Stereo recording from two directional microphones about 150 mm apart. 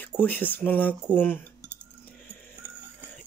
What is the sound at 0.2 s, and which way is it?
Speech, 10° left (ahead or behind).